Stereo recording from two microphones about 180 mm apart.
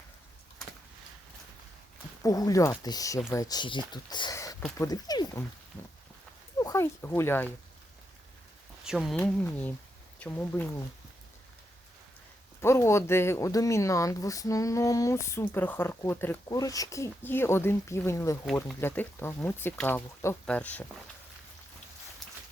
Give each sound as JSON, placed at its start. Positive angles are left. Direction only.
{"t": 2.2, "sound": "speech", "side_deg": 20}
{"t": 6.6, "sound": "speech", "side_deg": 15}
{"t": 8.8, "sound": "speech", "side_deg": 0}
{"t": 9.2, "sound": "speech", "side_deg": 10}
{"t": 12.6, "sound": "speech", "side_deg": 15}